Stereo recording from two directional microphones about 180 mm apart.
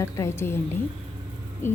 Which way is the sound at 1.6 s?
15° left (ahead or behind).